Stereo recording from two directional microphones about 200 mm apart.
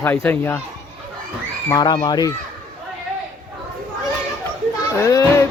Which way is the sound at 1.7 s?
20° left (ahead or behind).